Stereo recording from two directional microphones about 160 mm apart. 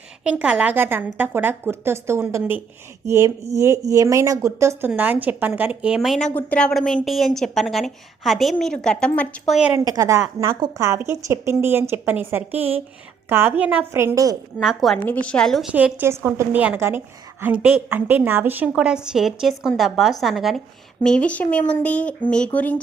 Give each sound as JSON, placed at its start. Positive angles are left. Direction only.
{"t": 0.3, "sound": "a woman's voice", "side_deg": -10}
{"t": 9.7, "sound": "a woman's voice", "side_deg": -25}
{"t": 14.6, "sound": "a woman's voice", "side_deg": 0}
{"t": 15.7, "sound": "a woman's voice", "side_deg": -10}